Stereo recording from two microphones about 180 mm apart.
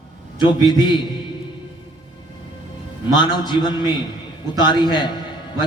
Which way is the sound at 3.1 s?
25° left (ahead or behind).